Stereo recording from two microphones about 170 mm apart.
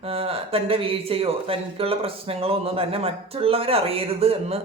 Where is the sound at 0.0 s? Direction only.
35° right (ahead or behind).